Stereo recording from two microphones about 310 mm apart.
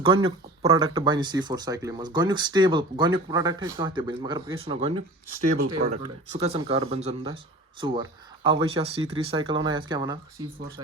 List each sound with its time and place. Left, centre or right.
0.0 s speech: centre